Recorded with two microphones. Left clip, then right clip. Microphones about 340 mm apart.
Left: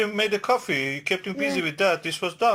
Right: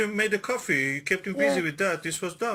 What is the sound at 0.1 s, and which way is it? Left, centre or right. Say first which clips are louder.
Speech: left 4 dB; left.